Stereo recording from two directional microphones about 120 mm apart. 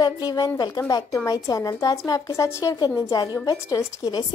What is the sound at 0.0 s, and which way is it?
Speech, 35° left (ahead or behind).